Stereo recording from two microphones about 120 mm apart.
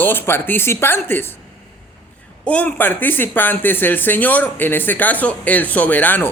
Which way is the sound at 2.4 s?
10° left (ahead or behind).